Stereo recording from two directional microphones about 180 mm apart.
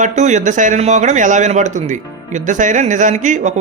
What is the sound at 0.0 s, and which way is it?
Speech, 40° right (ahead or behind).